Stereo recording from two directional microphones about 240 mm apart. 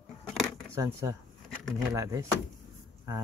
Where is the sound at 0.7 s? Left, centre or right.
Centre.